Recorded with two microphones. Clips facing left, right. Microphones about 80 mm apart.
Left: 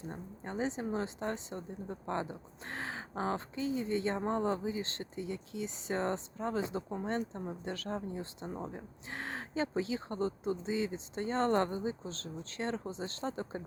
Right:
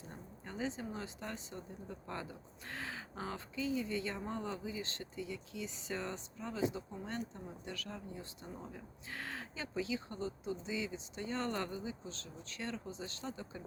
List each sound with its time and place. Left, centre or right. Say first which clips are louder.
0.1 s speech: left 6 dB; left